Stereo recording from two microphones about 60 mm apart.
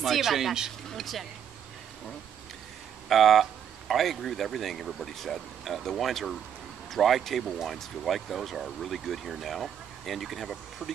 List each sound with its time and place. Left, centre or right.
0.0 s speech: centre
3.1 s speech: centre